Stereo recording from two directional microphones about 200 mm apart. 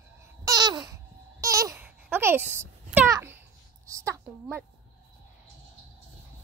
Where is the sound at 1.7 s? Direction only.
10° right (ahead or behind).